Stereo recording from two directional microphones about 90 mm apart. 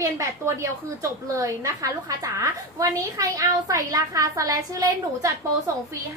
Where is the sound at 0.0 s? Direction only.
35° right (ahead or behind).